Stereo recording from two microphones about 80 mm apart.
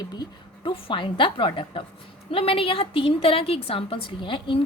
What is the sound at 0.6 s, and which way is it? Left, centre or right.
A woman's voice, left.